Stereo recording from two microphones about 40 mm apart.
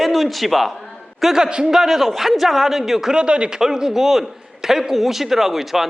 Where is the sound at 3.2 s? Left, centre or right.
Right.